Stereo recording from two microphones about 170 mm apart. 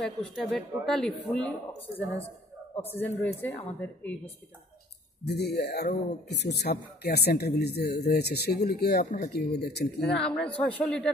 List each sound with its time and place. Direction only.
0.0 s a woman's voice: centre (ahead or behind)
5.4 s speech: 75° left (ahead or behind)
10.0 s speech: 5° left (ahead or behind)